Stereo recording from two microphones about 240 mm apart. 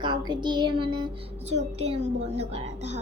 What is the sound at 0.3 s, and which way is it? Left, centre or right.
Speech, centre.